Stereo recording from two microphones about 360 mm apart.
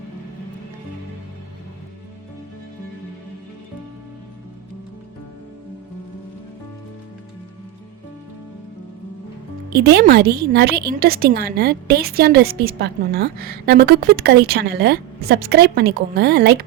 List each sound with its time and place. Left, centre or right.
9.6 s speech: right